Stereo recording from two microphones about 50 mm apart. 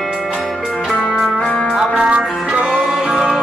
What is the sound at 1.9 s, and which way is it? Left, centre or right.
Music, centre.